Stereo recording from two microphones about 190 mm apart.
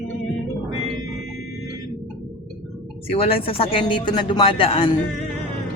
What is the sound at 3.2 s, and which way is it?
A man's voice, 30° left (ahead or behind).